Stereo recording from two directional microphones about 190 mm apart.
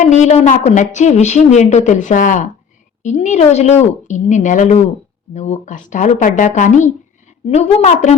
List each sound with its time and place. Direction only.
0.0 s a woman's voice: 40° left (ahead or behind)